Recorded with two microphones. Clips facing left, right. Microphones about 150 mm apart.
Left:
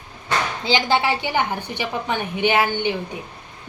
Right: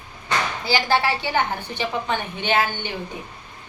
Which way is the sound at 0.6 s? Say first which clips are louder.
Left 1 dB; 20° left (ahead or behind).